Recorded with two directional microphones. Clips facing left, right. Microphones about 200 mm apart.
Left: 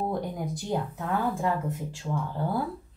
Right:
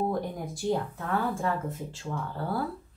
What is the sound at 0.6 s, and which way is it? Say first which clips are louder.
Speech: right 5 dB; 15° left (ahead or behind).